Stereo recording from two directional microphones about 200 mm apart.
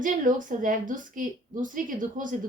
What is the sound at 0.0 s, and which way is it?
A woman's voice, 40° right (ahead or behind).